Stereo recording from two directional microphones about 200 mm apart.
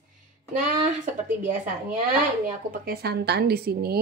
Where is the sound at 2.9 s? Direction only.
50° right (ahead or behind).